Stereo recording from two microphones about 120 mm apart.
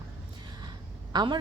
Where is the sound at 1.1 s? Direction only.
40° right (ahead or behind).